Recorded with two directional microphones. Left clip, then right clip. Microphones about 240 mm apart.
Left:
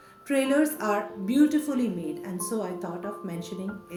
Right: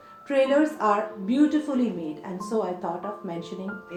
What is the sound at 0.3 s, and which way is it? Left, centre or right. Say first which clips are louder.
A woman's voice: right 3 dB; left.